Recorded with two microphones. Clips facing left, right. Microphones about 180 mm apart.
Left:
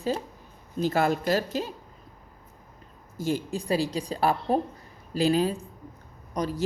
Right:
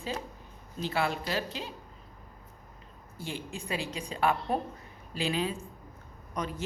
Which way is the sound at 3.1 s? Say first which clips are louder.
Left 10 dB; 40° left (ahead or behind).